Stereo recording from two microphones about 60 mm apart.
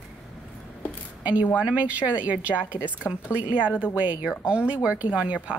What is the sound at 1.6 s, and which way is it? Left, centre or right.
A woman's voice, right.